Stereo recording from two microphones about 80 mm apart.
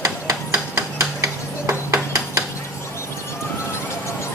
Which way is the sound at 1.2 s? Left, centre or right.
Right.